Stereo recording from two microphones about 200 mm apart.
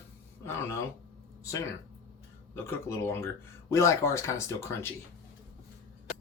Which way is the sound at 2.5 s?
10° left (ahead or behind).